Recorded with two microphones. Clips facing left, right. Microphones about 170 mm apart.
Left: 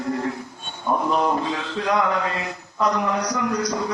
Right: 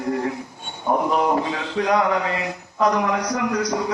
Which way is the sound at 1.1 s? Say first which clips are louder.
Right 1 dB; 15° right (ahead or behind).